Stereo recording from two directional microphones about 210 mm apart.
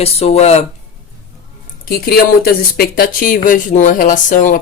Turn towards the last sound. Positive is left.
turn(degrees=40)  # may be behind; listen again after turning